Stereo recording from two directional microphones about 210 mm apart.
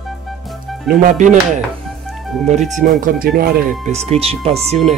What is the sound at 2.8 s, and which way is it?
Speech, 35° right (ahead or behind).